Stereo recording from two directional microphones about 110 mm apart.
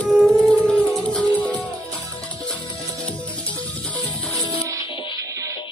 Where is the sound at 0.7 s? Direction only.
10° left (ahead or behind).